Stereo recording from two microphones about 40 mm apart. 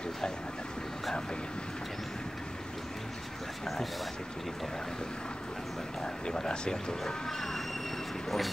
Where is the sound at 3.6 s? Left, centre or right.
Centre.